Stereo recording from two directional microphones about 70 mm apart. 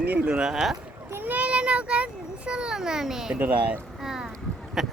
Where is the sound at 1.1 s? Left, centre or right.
Right; by 3.3 s centre.